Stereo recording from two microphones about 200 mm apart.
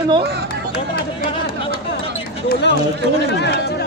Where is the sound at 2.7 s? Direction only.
60° left (ahead or behind).